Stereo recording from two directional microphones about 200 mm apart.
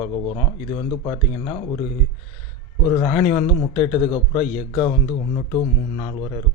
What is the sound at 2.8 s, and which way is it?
Speech, 20° left (ahead or behind).